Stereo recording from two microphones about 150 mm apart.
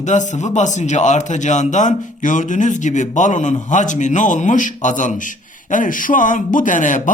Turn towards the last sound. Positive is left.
turn(degrees=60)  # may be behind; listen again after turning